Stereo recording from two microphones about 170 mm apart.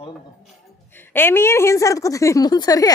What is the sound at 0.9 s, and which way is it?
A woman's voice, 10° left (ahead or behind).